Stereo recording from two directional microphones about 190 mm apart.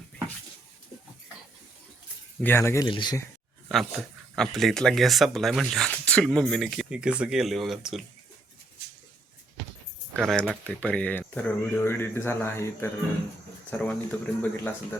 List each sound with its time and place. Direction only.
2.4 s speech: 10° left (ahead or behind)
3.7 s speech: centre (ahead or behind)
10.2 s speech: centre (ahead or behind)